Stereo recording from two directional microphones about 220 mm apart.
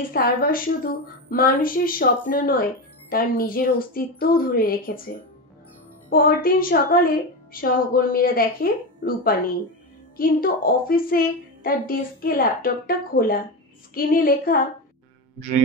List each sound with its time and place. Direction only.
0.1 s a woman's voice: 40° left (ahead or behind)